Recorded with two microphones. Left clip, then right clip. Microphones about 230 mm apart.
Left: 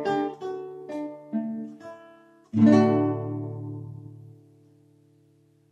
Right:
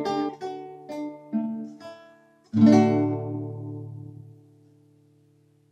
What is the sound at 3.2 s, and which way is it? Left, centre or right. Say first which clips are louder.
Music: even; left.